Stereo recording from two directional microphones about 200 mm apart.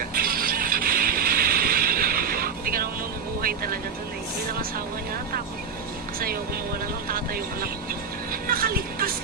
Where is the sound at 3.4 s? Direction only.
45° right (ahead or behind).